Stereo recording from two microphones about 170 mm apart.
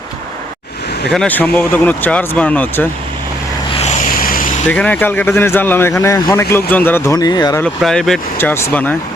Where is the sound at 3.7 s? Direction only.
40° left (ahead or behind).